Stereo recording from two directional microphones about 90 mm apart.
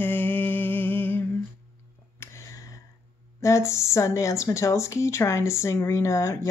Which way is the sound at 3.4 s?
35° left (ahead or behind).